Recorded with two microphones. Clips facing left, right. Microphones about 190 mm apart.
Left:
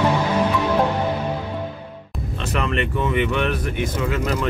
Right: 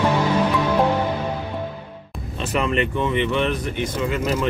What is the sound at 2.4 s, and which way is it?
Speech, centre (ahead or behind).